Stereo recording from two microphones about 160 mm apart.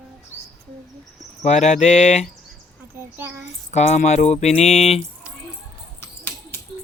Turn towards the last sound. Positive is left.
turn(degrees=15)  # may be behind; listen again after turning